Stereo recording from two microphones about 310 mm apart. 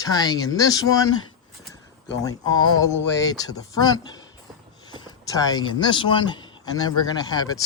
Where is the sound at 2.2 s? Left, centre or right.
Centre.